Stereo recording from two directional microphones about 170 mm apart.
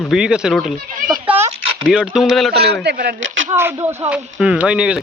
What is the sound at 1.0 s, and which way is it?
Speech, 50° right (ahead or behind).